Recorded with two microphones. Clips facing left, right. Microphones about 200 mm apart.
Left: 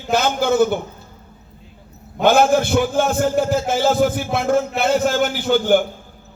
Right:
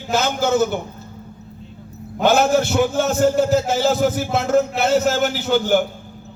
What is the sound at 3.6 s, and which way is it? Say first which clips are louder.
A man's voice: left 1 dB; 55° left (ahead or behind).